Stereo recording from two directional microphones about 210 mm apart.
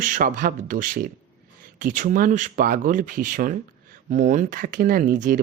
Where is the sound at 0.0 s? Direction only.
40° right (ahead or behind).